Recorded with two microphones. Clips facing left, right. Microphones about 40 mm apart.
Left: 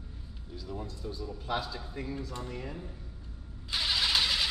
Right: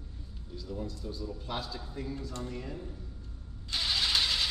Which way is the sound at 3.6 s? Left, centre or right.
Centre.